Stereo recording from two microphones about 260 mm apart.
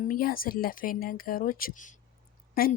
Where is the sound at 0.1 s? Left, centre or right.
Left.